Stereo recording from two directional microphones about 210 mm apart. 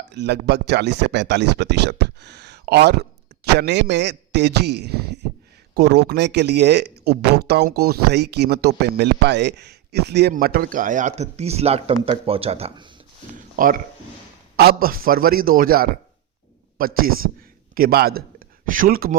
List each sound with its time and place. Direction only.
0.1 s speech: 55° right (ahead or behind); by 12.9 s 25° right (ahead or behind)
13.3 s speech: 40° right (ahead or behind)